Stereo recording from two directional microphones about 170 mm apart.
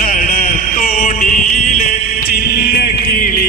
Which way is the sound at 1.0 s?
40° left (ahead or behind).